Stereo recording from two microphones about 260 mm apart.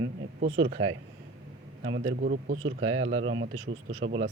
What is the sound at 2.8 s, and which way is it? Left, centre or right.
Speech, right.